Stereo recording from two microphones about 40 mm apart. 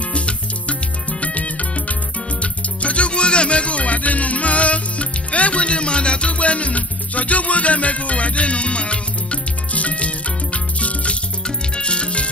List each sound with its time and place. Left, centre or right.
0.1 s music: left